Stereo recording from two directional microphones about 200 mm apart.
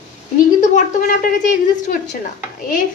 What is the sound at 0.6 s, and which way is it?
A woman's voice, 40° left (ahead or behind).